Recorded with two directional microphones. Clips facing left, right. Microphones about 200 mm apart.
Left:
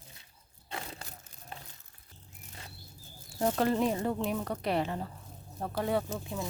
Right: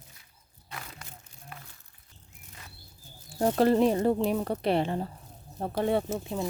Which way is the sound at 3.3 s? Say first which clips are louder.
Right 5 dB; 35° right (ahead or behind).